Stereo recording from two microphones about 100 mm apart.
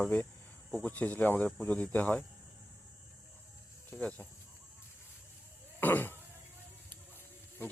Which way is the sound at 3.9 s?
15° left (ahead or behind).